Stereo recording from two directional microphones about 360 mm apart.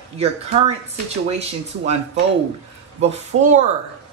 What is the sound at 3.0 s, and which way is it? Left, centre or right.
Speech, centre.